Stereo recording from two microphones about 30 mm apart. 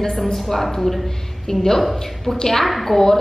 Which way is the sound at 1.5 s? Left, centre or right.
Centre.